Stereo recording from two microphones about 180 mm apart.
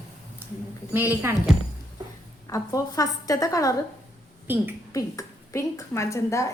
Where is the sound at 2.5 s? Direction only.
20° left (ahead or behind).